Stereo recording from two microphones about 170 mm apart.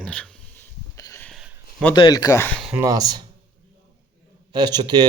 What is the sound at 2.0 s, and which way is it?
Speech, 25° left (ahead or behind).